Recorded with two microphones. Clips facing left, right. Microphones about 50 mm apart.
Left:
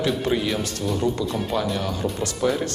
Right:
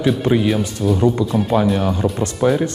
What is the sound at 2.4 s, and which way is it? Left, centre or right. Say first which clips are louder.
Speech: right 6 dB; right.